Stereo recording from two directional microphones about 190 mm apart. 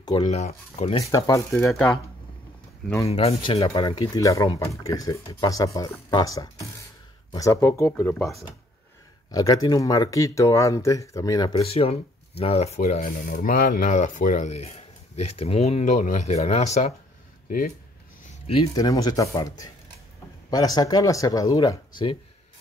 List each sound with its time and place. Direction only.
0.0 s speech: 20° left (ahead or behind)
0.7 s speech: 30° left (ahead or behind)
1.0 s speech: 15° left (ahead or behind)
3.1 s speech: 30° left (ahead or behind)
3.6 s speech: 20° left (ahead or behind)
9.3 s speech: 20° left (ahead or behind); by 16.9 s 35° left (ahead or behind)
17.5 s speech: 45° left (ahead or behind)
18.3 s a sound: 30° left (ahead or behind)
18.8 s speech: 20° left (ahead or behind)